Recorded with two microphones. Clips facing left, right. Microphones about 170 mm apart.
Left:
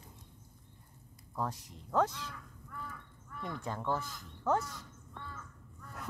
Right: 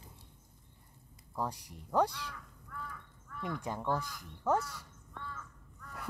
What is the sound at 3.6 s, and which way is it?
Speech, 15° right (ahead or behind).